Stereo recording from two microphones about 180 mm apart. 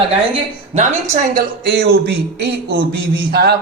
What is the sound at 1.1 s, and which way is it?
A man's voice, 60° right (ahead or behind).